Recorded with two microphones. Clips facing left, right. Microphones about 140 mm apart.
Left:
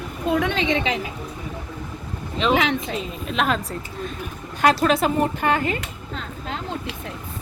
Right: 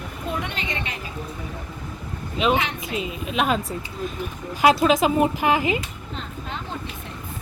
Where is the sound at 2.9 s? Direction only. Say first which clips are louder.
Even; 5° right (ahead or behind).